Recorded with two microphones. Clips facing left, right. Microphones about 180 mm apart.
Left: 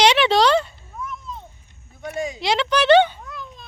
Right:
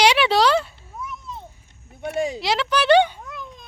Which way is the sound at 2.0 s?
30° right (ahead or behind).